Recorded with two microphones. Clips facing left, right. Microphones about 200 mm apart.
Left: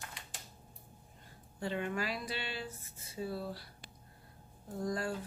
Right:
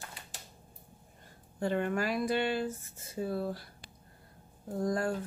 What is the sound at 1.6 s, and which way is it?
Speech, 50° right (ahead or behind).